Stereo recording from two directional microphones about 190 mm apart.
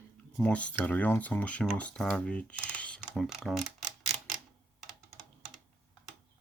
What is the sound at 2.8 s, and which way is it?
Camera, 5° left (ahead or behind).